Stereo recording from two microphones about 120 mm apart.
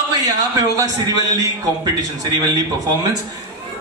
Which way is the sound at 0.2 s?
30° right (ahead or behind).